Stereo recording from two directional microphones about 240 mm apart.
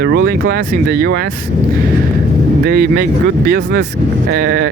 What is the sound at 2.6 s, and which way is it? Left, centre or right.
Speech, right.